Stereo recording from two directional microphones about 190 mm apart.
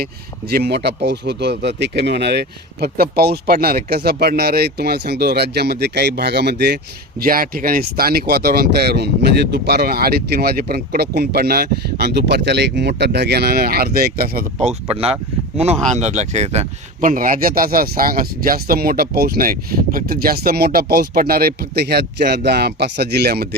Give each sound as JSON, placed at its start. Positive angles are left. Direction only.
{"t": 0.5, "sound": "speech", "side_deg": -60}
{"t": 7.2, "sound": "speech", "side_deg": -50}
{"t": 14.8, "sound": "speech", "side_deg": -30}